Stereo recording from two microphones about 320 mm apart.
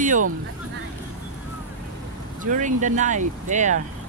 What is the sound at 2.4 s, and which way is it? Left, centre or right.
Speech, right.